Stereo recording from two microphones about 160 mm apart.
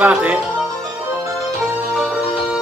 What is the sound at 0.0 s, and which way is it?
Speech, 10° right (ahead or behind).